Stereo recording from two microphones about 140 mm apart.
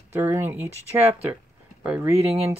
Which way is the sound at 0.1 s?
15° right (ahead or behind).